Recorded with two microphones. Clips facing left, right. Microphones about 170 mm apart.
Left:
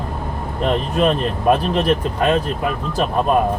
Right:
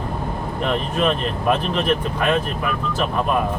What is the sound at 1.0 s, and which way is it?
Speech, 40° left (ahead or behind).